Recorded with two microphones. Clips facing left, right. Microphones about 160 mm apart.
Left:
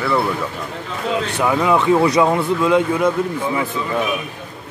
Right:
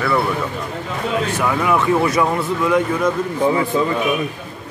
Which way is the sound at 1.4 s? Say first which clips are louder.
Left 3 dB; 20° left (ahead or behind).